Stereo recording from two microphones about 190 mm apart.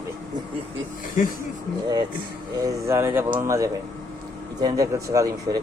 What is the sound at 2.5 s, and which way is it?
Speech, 20° right (ahead or behind).